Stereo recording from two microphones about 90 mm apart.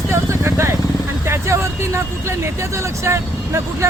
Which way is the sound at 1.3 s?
30° right (ahead or behind).